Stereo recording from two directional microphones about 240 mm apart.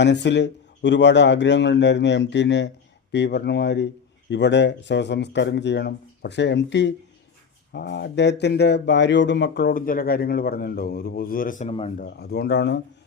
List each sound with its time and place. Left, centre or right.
0.0 s speech: left
12.2 s speech: left